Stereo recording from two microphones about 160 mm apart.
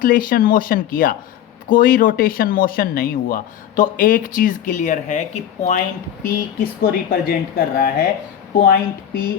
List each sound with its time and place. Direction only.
0.0 s speech: 60° left (ahead or behind)
6.2 s speech: 65° left (ahead or behind)